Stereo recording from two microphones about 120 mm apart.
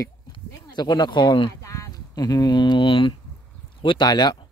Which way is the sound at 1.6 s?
25° left (ahead or behind).